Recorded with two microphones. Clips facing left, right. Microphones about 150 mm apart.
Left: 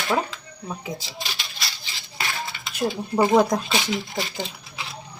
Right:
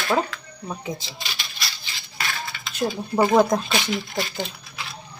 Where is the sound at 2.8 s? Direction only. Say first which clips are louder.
Even; 10° left (ahead or behind).